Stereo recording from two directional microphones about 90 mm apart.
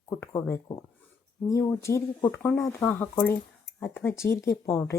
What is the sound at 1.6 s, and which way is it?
Speech, 30° left (ahead or behind).